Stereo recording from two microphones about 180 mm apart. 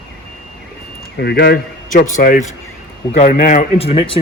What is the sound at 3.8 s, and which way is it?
Speech, 30° left (ahead or behind).